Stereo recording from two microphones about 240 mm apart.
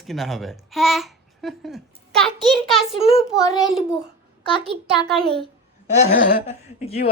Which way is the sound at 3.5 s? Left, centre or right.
Centre.